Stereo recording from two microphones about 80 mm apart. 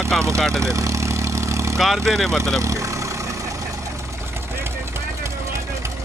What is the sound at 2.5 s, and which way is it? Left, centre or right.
Vehicle, right.